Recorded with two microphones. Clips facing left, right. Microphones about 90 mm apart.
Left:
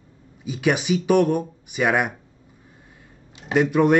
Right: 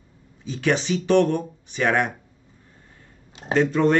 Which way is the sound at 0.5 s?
10° left (ahead or behind).